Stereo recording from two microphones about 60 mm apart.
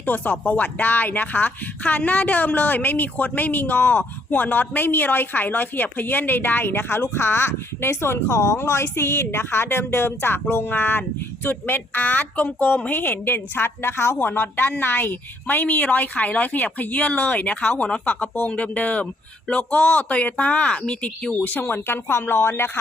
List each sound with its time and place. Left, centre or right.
0.0 s a woman's voice: left